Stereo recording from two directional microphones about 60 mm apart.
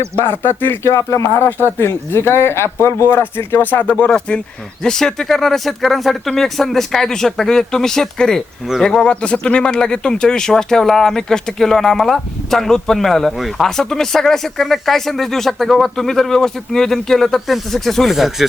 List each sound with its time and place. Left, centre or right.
0.3 s speech: left
0.9 s speech: left
1.4 s speech: left
4.8 s speech: centre